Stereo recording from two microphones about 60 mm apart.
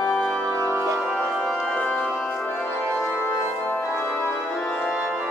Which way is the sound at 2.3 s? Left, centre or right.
Left.